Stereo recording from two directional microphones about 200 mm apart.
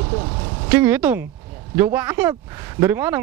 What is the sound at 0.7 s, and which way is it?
Speech, 10° right (ahead or behind).